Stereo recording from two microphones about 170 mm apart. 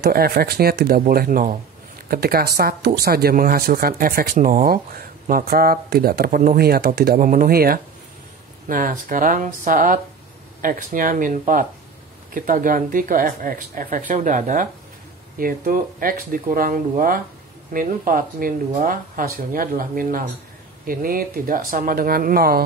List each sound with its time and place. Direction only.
0.0 s speech: 65° right (ahead or behind)